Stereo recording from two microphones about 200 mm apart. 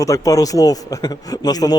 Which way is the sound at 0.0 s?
15° left (ahead or behind).